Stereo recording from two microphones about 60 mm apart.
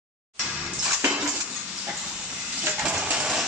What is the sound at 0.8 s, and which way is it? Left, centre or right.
Cutlery, right.